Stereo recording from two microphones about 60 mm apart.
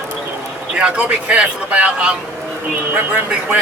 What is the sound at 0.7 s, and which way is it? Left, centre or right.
Speech, centre.